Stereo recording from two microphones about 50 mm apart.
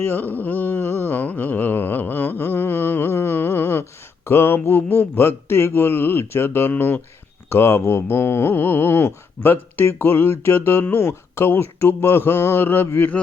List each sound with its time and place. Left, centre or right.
0.0 s music: left
4.3 s speech: left